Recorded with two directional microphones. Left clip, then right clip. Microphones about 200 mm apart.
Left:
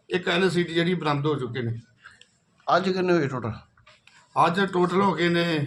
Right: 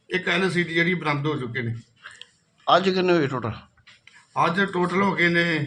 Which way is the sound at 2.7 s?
Centre (ahead or behind).